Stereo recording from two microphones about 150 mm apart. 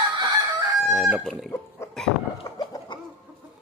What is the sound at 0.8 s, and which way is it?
Speech, centre (ahead or behind).